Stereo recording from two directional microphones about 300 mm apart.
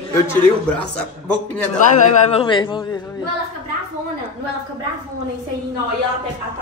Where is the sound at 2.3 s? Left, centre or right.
Centre.